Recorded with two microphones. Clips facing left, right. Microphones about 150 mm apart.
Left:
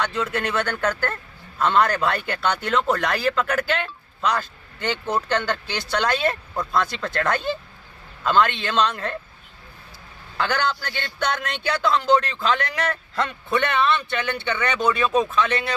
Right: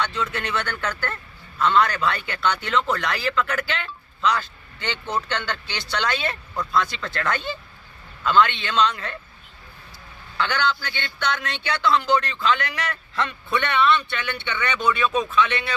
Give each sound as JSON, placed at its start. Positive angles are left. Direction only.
{"t": 0.0, "sound": "a man's voice", "side_deg": 50}
{"t": 10.3, "sound": "a man's voice", "side_deg": 45}